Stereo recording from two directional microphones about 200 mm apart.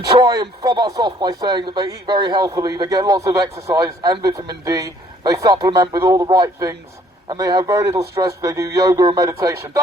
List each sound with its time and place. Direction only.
0.2 s a man's voice: 20° right (ahead or behind)